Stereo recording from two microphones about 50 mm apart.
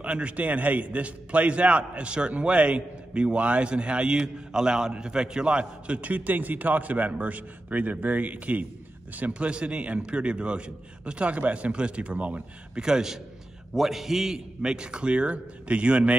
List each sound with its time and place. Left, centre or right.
0.0 s a man's voice: right
5.9 s a man's voice: right
9.3 s a man's voice: right
12.7 s a man's voice: centre